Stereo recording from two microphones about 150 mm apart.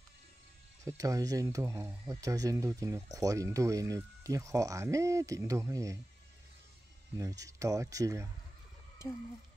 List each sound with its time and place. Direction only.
0.8 s speech: 20° right (ahead or behind)
7.2 s speech: 20° right (ahead or behind)